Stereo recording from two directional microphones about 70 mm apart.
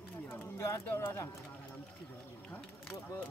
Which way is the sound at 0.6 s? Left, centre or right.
Left.